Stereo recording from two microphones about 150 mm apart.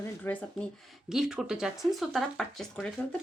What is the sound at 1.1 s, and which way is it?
Speech, 5° right (ahead or behind).